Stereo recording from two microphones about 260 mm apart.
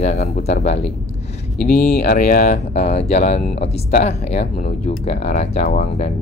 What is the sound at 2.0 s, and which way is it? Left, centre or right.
Speech, left.